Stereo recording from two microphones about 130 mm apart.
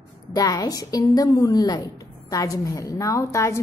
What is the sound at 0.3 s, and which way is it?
A woman's voice, 30° left (ahead or behind).